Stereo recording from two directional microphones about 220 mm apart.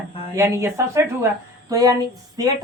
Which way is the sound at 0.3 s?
10° right (ahead or behind).